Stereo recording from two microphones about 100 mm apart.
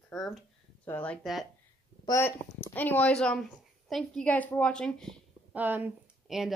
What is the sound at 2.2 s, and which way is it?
A woman's voice, 20° left (ahead or behind).